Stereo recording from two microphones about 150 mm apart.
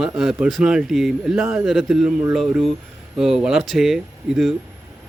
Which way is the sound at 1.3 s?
15° right (ahead or behind).